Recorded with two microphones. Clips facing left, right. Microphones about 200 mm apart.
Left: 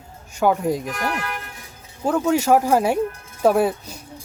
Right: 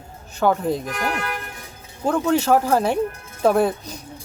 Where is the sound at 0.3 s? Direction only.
10° left (ahead or behind).